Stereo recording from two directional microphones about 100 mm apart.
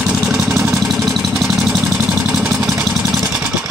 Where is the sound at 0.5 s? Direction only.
25° right (ahead or behind).